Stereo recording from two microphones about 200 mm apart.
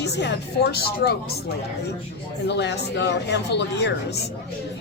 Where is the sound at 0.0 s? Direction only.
60° left (ahead or behind).